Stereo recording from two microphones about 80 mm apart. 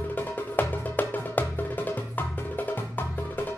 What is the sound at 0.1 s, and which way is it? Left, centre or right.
Music, left.